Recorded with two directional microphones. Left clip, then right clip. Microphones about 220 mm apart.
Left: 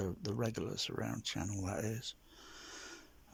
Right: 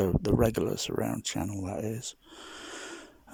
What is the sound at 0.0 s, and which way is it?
Speech, 35° right (ahead or behind).